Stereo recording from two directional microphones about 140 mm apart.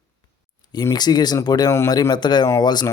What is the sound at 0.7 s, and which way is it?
Speech, 30° left (ahead or behind).